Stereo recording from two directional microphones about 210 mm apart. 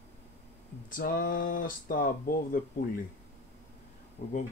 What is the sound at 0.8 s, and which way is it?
Speech, 40° left (ahead or behind).